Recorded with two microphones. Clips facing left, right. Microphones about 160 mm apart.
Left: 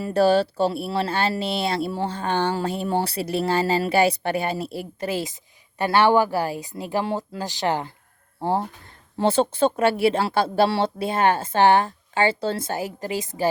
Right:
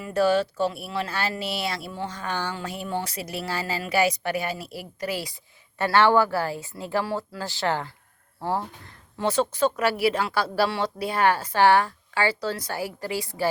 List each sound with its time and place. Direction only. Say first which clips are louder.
0.0 s speech: left 3 dB; 30° left (ahead or behind)